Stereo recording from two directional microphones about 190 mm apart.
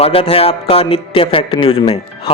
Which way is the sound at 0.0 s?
30° left (ahead or behind).